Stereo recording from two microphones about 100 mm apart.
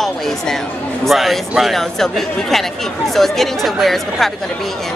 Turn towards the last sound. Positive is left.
turn(degrees=0)  # may be behind; listen again after turning